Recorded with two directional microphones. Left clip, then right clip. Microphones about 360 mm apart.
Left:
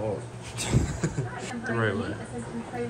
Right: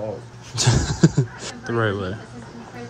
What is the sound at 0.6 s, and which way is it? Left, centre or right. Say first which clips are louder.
Speech: right 10 dB; centre.